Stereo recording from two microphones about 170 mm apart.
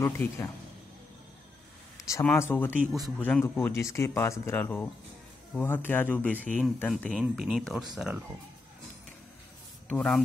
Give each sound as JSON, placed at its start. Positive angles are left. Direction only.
{"t": 0.0, "sound": "a man's voice", "side_deg": 20}
{"t": 2.0, "sound": "a sound", "side_deg": 20}
{"t": 2.3, "sound": "speech", "side_deg": 15}
{"t": 2.7, "sound": "speech", "side_deg": -10}
{"t": 3.2, "sound": "speech", "side_deg": 10}
{"t": 7.2, "sound": "speech", "side_deg": -5}
{"t": 9.8, "sound": "speech", "side_deg": 5}